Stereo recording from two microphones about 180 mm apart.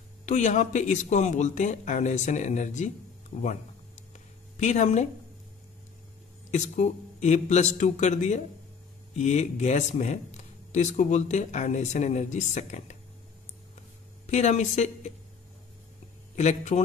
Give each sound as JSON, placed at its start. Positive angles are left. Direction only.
{"t": 0.2, "sound": "speech", "side_deg": 40}
{"t": 4.1, "sound": "a sound", "side_deg": 40}
{"t": 6.5, "sound": "speech", "side_deg": 40}
{"t": 14.2, "sound": "speech", "side_deg": 40}
{"t": 16.3, "sound": "speech", "side_deg": 40}